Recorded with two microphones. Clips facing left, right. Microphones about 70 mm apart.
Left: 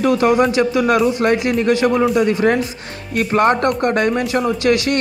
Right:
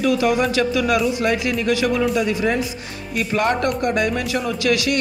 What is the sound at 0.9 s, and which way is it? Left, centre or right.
Speech, left.